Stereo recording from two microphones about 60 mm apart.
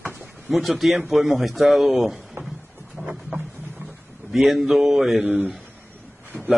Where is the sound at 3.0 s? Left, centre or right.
Right.